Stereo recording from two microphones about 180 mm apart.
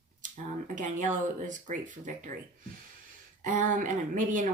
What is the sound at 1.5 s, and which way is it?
Speech, 45° right (ahead or behind).